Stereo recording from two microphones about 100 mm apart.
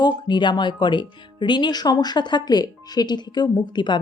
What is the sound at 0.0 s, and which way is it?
Speech, 50° left (ahead or behind).